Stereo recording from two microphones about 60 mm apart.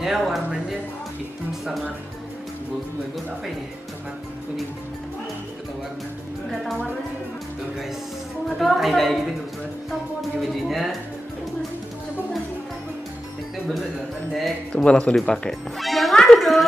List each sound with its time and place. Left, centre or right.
0.0 s a woman's voice: centre
8.5 s a woman's voice: centre
10.5 s a woman's voice: centre
14.7 s speech: centre
15.8 s music: centre